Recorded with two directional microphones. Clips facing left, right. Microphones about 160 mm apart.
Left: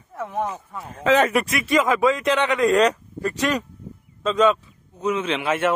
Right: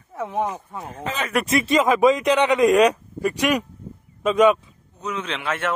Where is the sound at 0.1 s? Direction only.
15° right (ahead or behind).